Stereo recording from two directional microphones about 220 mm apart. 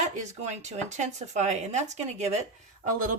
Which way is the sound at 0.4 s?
30° right (ahead or behind).